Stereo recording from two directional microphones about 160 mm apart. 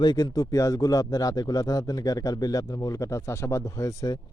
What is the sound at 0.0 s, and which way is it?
A man's voice, 25° left (ahead or behind).